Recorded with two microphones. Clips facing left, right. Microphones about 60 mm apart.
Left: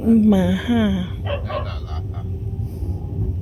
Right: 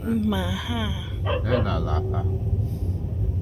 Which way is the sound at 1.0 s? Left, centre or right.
Centre.